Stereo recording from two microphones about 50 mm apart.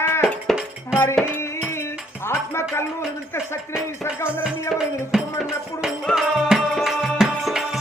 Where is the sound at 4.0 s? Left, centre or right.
Left.